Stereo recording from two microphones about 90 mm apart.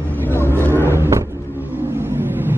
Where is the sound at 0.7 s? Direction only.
30° right (ahead or behind).